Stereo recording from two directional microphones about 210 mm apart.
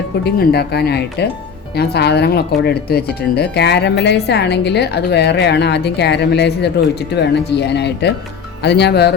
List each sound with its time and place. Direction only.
0.3 s speech: 50° left (ahead or behind)